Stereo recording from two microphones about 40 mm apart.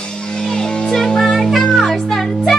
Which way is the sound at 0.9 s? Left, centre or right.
Centre.